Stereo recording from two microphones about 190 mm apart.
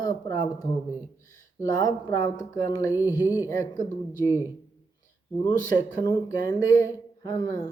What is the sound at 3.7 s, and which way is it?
Speech, 40° left (ahead or behind).